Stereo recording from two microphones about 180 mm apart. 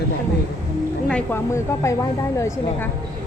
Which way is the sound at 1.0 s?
10° left (ahead or behind).